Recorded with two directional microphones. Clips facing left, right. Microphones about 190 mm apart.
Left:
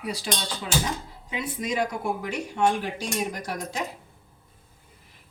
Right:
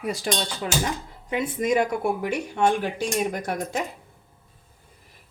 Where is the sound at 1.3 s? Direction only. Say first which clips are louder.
Right 6 dB; 50° right (ahead or behind).